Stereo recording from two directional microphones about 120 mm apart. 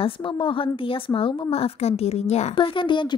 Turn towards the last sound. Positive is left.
turn(degrees=40)  # may be behind; listen again after turning